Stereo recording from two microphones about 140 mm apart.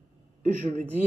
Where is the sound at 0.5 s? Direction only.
60° right (ahead or behind).